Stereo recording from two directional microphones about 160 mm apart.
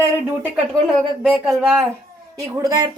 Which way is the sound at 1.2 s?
Centre (ahead or behind).